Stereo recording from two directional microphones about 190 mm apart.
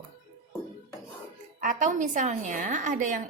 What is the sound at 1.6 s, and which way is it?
Speech, 40° right (ahead or behind).